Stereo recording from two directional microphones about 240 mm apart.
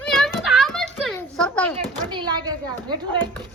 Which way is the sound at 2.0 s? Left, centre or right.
Centre.